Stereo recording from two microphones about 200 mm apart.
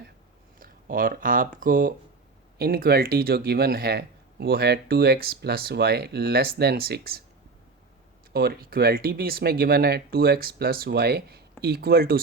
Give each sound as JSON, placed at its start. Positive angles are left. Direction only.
{"t": 0.6, "sound": "speech", "side_deg": -45}
{"t": 8.3, "sound": "speech", "side_deg": -50}